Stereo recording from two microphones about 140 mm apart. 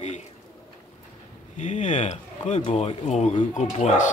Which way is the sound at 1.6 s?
55° left (ahead or behind).